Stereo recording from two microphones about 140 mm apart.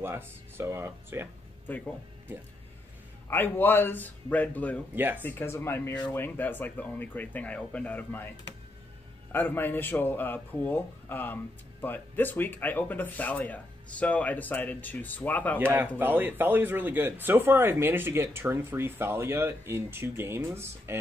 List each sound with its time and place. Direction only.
0.0 s speech: 15° right (ahead or behind)
1.7 s speech: 15° left (ahead or behind)
3.3 s speech: 15° left (ahead or behind)
4.9 s speech: 15° right (ahead or behind)
5.2 s speech: 15° left (ahead or behind)
9.3 s speech: 15° left (ahead or behind)
16.0 s speech: 15° right (ahead or behind)